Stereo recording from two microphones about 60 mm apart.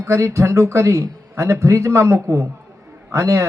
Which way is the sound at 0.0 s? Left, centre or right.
Right.